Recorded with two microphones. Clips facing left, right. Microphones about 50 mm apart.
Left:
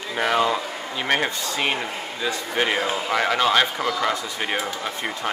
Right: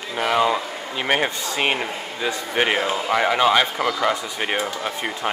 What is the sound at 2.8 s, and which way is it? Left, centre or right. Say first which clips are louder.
Speech: right 2 dB; centre.